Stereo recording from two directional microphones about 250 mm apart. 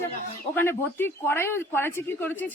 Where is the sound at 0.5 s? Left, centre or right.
Centre.